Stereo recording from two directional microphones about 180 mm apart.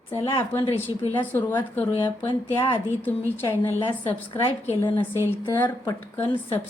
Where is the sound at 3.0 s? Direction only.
10° left (ahead or behind).